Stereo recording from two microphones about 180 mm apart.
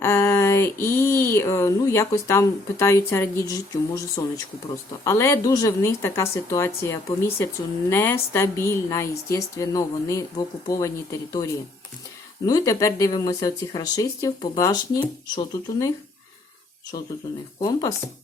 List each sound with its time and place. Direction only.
0.0 s a sound: 15° left (ahead or behind)
5.0 s a woman's voice: 15° left (ahead or behind)
12.5 s speech: 20° left (ahead or behind)
17.6 s speech: 20° left (ahead or behind)